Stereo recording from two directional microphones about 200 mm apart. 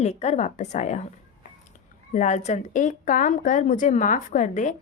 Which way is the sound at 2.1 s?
35° left (ahead or behind).